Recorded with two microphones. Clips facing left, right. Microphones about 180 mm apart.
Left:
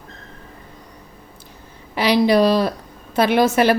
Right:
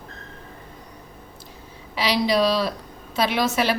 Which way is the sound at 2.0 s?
55° left (ahead or behind).